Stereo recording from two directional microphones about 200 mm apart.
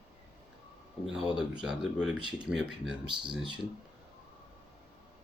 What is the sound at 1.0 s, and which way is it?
Speech, centre (ahead or behind).